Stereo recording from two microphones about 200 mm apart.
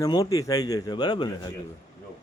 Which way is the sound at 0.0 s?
15° left (ahead or behind).